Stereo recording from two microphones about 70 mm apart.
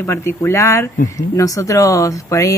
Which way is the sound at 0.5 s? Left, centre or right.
Left.